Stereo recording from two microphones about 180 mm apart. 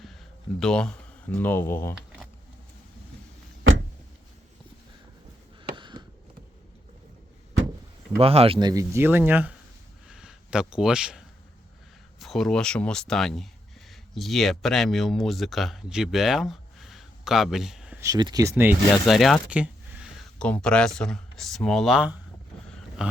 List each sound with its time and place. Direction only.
0.6 s speech: 5° left (ahead or behind)
5.7 s a sound: 25° right (ahead or behind)
8.2 s a man's voice: 30° right (ahead or behind); by 9.6 s 10° right (ahead or behind)
10.1 s a sound: 5° right (ahead or behind)
12.2 s speech: centre (ahead or behind)
18.0 s a man's voice: 20° right (ahead or behind)
19.0 s speech: centre (ahead or behind)
20.4 s speech: 5° left (ahead or behind)
23.0 s a sound: 5° right (ahead or behind)